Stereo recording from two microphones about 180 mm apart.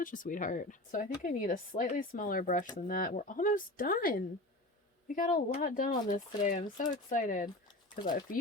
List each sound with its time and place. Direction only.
0.0 s speech: 50° left (ahead or behind)